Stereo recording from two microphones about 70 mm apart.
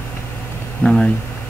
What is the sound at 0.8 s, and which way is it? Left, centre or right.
Speech, centre.